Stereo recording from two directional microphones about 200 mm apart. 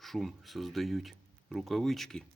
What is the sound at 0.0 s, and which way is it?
Speech, centre (ahead or behind).